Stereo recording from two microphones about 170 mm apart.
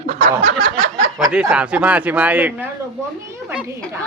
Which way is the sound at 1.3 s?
5° right (ahead or behind).